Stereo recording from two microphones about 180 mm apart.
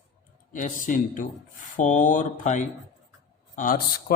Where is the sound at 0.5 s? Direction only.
45° left (ahead or behind).